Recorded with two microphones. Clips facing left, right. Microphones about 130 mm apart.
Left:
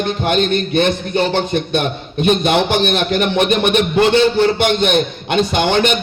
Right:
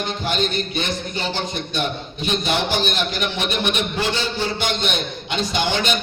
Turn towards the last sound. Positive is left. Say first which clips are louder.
# left 7 dB
turn(degrees=55)  # may be behind; listen again after turning